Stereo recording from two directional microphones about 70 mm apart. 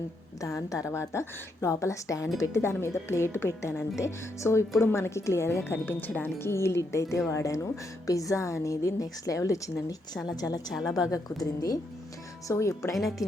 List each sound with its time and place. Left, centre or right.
0.4 s a woman's voice: left
10.2 s a woman's voice: left
10.8 s a woman's voice: left
12.5 s a woman's voice: left
13.0 s a woman's voice: centre